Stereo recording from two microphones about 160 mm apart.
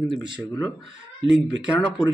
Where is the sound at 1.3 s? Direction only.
5° right (ahead or behind).